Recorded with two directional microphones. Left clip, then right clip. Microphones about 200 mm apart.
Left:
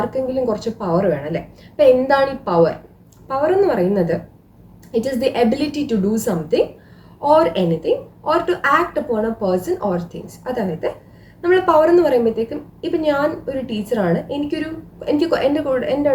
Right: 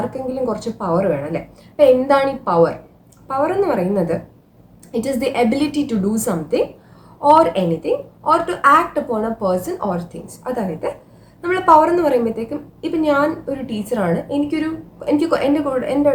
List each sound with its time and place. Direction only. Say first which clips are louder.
0.4 s a woman's voice: even; 15° right (ahead or behind)